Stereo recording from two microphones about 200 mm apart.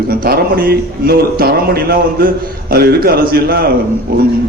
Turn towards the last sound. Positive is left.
turn(degrees=-50)  # may be behind; listen again after turning